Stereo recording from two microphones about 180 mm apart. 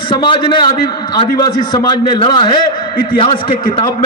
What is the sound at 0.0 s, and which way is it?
A man's voice, 25° left (ahead or behind).